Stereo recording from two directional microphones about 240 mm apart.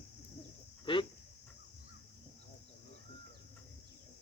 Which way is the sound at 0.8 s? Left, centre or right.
Centre.